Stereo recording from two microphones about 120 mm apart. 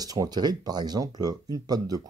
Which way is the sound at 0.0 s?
30° right (ahead or behind).